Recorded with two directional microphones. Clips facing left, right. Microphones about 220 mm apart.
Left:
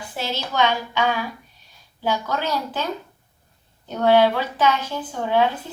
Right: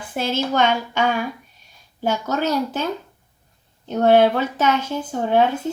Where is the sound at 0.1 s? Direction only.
50° right (ahead or behind).